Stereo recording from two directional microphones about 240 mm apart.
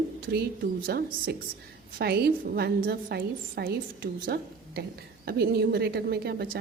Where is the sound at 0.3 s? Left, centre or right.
Right.